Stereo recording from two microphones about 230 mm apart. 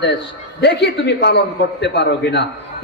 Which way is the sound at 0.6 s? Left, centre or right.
Left.